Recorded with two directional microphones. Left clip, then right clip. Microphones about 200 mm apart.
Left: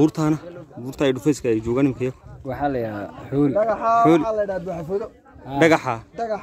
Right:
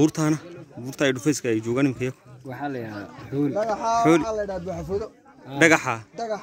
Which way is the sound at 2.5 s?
55° left (ahead or behind).